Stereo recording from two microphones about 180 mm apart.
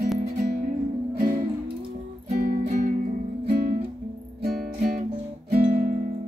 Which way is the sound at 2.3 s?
55° right (ahead or behind).